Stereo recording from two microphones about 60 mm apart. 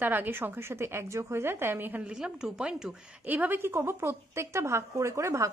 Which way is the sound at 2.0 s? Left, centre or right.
Centre.